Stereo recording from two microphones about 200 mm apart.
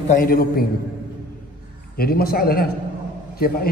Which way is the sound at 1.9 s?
50° left (ahead or behind).